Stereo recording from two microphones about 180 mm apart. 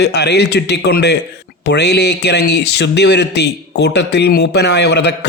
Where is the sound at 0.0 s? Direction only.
70° left (ahead or behind).